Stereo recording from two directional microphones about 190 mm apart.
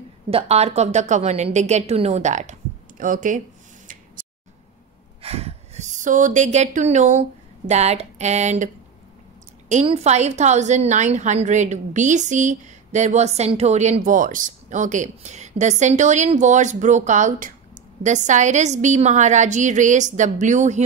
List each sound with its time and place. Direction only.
0.3 s a woman's voice: 35° right (ahead or behind)
3.8 s scissors: 45° right (ahead or behind)
5.2 s a woman's voice: 30° right (ahead or behind)
9.7 s a woman's voice: 35° right (ahead or behind)